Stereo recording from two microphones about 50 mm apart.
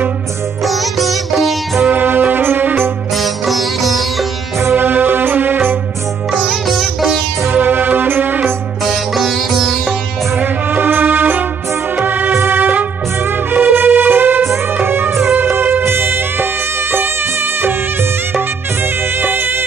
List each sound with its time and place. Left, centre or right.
0.7 s sitar: centre
1.9 s music: right
3.2 s sitar: centre
4.7 s music: right
6.3 s sitar: centre
7.5 s music: right
8.8 s sitar: centre
10.4 s music: right
14.5 s music: right
19.2 s music: right